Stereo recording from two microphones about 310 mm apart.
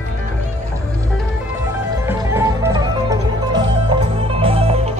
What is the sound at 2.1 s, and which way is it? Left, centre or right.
Music, centre.